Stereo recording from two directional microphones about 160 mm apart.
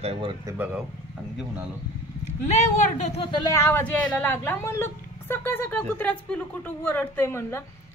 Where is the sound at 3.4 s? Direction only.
15° left (ahead or behind).